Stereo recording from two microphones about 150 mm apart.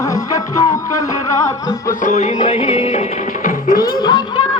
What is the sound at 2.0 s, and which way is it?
Music, 55° left (ahead or behind).